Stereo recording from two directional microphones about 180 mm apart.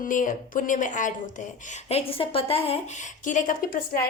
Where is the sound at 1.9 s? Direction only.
35° left (ahead or behind); by 3.8 s 50° left (ahead or behind).